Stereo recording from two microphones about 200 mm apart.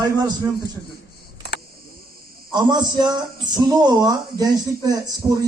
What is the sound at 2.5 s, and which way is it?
A man's voice, 20° right (ahead or behind).